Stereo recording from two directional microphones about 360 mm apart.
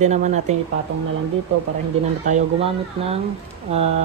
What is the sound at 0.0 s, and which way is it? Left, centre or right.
Speech, centre.